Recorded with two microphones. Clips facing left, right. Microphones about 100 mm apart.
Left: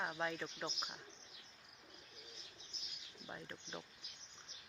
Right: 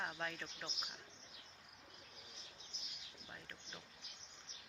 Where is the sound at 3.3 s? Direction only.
30° left (ahead or behind).